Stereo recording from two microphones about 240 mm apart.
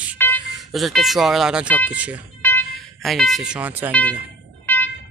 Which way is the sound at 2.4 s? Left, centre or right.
Centre.